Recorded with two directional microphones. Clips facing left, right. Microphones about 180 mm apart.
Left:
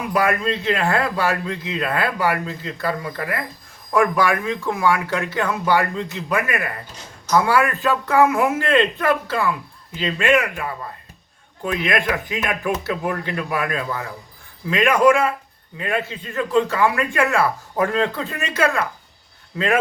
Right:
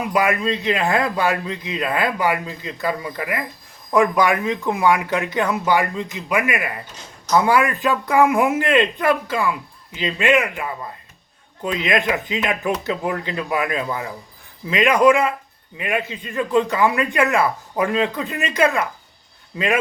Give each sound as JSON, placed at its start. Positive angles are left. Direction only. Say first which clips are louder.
{"t": 0.1, "sound": "speech", "louder": "even", "side_deg": -15}